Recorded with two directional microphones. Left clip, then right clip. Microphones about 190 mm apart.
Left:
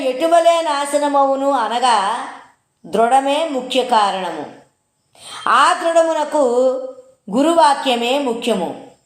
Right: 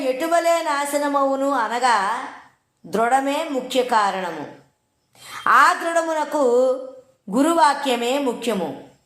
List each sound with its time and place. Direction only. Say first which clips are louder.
0.0 s a woman's voice: left 6 dB; 35° right (ahead or behind)
5.3 s a woman's voice: left 2 dB; 35° right (ahead or behind)